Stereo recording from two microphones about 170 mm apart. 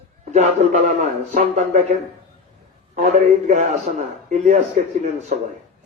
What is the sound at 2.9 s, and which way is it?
A man's voice, 45° right (ahead or behind).